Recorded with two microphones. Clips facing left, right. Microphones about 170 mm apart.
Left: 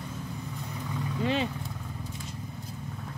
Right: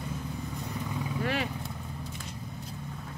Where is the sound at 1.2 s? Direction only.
20° left (ahead or behind).